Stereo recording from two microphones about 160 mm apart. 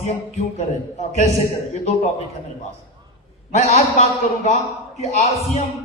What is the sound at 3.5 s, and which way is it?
A man's voice, 45° left (ahead or behind).